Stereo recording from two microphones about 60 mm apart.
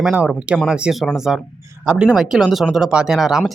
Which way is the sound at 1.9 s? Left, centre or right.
Centre.